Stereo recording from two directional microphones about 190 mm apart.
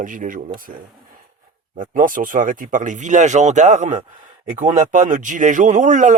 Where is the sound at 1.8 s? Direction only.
45° right (ahead or behind).